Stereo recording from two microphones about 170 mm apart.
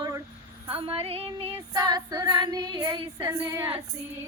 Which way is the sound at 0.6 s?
35° right (ahead or behind).